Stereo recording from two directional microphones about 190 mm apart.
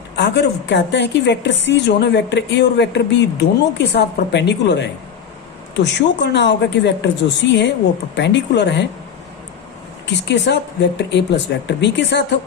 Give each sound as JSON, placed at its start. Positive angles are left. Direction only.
{"t": 0.2, "sound": "a woman's voice", "side_deg": 65}
{"t": 10.2, "sound": "a woman's voice", "side_deg": 65}